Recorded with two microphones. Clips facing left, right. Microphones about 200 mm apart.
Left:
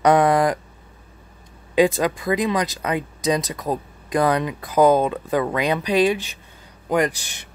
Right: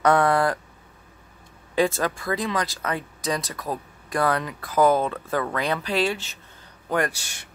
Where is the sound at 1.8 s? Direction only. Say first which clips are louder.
Left 5 dB; 15° left (ahead or behind).